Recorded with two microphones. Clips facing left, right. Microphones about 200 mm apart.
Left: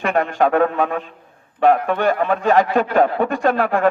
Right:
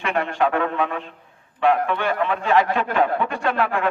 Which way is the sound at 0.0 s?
40° left (ahead or behind).